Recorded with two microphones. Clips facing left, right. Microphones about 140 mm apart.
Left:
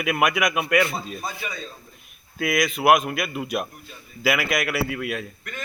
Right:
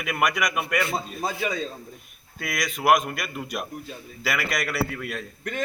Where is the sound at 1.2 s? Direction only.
90° right.